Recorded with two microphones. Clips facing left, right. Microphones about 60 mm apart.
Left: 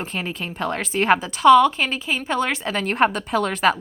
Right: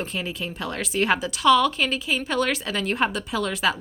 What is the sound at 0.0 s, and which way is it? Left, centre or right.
A woman's voice, left.